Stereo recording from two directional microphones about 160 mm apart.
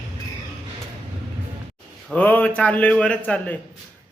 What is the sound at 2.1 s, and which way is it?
A man's voice, 10° left (ahead or behind).